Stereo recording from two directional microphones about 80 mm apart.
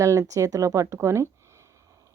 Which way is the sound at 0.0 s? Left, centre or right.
Right.